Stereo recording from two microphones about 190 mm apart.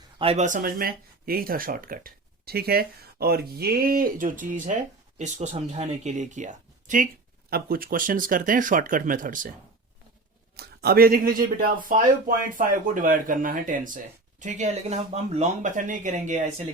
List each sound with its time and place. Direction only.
0.2 s speech: 35° right (ahead or behind)
10.6 s speech: 55° right (ahead or behind); by 16.5 s 40° right (ahead or behind)